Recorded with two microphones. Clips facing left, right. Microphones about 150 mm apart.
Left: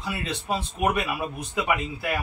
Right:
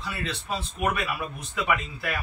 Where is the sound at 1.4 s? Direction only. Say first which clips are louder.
Even; 20° left (ahead or behind).